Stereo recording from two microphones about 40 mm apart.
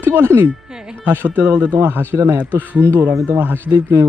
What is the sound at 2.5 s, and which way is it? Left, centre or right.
Speech, right.